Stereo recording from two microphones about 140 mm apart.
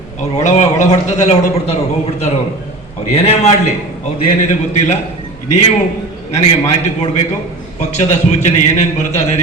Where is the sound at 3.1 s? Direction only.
45° left (ahead or behind).